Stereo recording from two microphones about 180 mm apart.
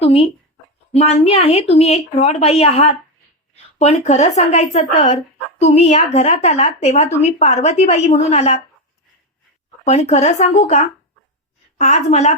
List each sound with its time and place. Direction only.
0.0 s speech: 30° left (ahead or behind)
9.8 s speech: 40° left (ahead or behind)